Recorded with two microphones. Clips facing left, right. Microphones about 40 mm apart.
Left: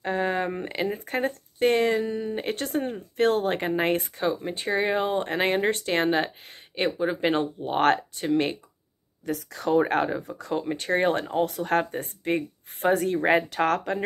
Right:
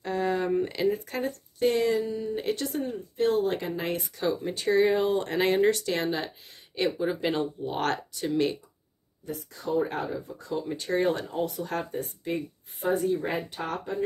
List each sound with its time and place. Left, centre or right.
0.0 s speech: left
4.3 s speech: left
5.8 s speech: left
7.0 s speech: left
7.3 s speech: left
9.2 s speech: left
10.5 s speech: left
12.9 s speech: left